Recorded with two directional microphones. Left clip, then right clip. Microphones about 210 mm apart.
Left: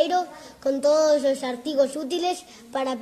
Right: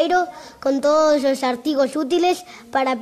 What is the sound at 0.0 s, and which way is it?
A child's voice, 30° right (ahead or behind).